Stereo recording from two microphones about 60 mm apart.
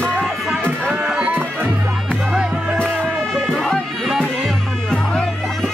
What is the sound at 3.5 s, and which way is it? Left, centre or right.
Music, centre.